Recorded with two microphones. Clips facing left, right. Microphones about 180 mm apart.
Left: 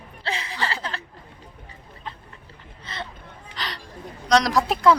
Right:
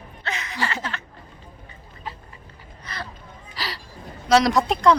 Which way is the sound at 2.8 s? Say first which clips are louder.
Even; 25° left (ahead or behind).